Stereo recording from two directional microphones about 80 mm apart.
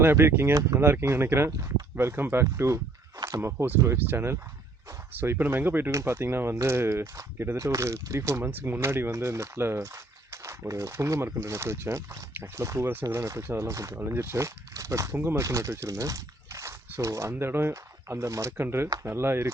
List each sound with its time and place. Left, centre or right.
0.0 s speech: right
5.9 s speech: right
8.4 s speech: right
13.9 s speech: right
15.4 s speech: right